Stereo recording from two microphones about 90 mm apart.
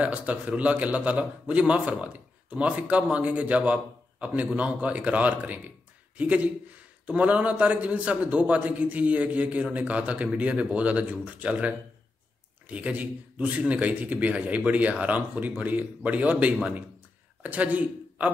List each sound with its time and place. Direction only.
0.0 s a man's voice: 15° right (ahead or behind)